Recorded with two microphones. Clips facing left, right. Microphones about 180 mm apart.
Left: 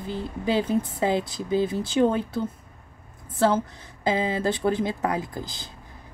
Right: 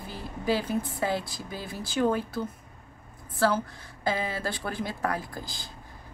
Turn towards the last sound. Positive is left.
turn(degrees=20)  # may be behind; listen again after turning